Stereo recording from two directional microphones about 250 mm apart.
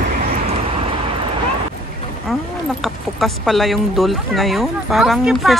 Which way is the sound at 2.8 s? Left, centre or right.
Centre.